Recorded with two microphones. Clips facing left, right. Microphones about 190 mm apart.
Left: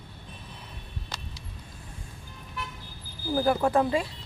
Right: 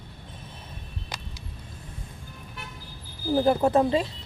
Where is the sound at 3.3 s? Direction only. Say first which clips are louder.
Right 3 dB; 25° right (ahead or behind).